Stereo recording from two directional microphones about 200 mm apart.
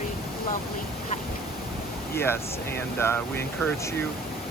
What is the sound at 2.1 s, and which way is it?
Speech, 10° left (ahead or behind).